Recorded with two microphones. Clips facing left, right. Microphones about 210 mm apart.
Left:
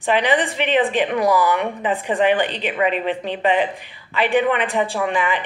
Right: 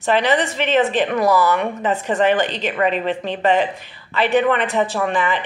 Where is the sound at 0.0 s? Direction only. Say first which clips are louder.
Right 1 dB; 15° left (ahead or behind).